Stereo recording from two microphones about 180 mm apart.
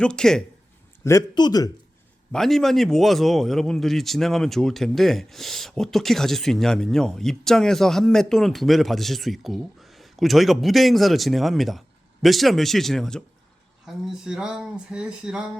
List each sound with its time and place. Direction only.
0.0 s a man's voice: 5° left (ahead or behind)
1.0 s a man's voice: 20° left (ahead or behind)
2.3 s a man's voice: centre (ahead or behind)